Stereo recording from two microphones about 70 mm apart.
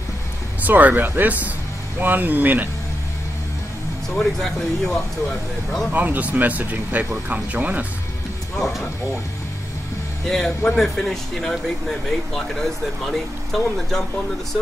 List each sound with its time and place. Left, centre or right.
0.6 s speech: right
4.1 s speech: centre
5.9 s speech: right
8.5 s speech: centre
10.2 s speech: centre